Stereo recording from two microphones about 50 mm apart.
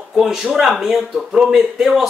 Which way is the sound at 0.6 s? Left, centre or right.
Centre.